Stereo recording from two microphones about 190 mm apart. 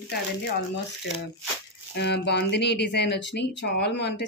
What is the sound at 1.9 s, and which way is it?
Speech, 65° left (ahead or behind).